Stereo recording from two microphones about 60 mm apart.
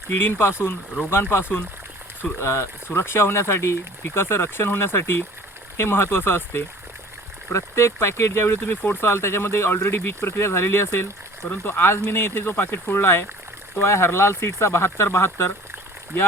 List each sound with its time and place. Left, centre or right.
0.1 s speech: left
0.9 s speech: right
1.3 s speech: left
2.4 s speech: left